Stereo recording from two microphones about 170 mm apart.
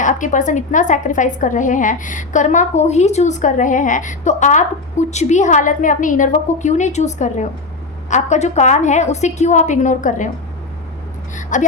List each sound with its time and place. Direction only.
0.0 s a woman's voice: 45° left (ahead or behind)
11.3 s a woman's voice: 45° left (ahead or behind)